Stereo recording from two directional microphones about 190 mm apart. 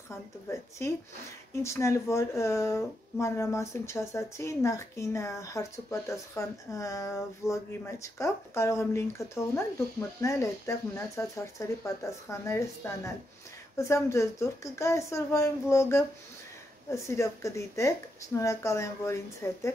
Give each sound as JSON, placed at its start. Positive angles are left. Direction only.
{"t": 0.1, "sound": "speech", "side_deg": 15}